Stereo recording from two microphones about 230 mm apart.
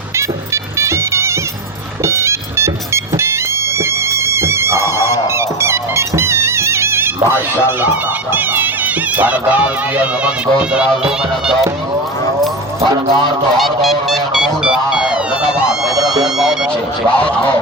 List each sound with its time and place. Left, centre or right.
0.2 s music: centre
7.8 s speech: centre
12.8 s speech: right
13.6 s a sound: centre
16.2 s vehicle: centre
17.2 s speech: centre